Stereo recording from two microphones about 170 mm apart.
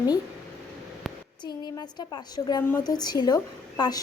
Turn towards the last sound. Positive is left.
turn(degrees=25)  # may be behind; listen again after turning